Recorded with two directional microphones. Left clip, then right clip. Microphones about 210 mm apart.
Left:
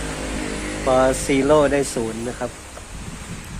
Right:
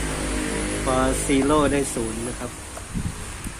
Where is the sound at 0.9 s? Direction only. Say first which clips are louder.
Left 6 dB; 30° left (ahead or behind).